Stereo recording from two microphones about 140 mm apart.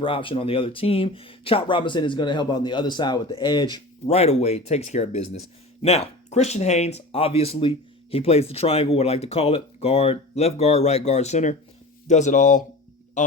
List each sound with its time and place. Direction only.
0.0 s speech: 40° left (ahead or behind)
4.0 s speech: 50° left (ahead or behind)